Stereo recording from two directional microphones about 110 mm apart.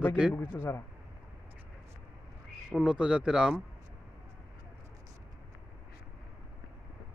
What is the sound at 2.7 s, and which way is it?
Speech, 10° right (ahead or behind).